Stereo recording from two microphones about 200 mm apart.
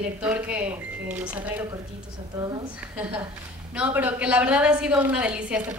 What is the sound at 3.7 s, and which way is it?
A woman's voice, 5° right (ahead or behind).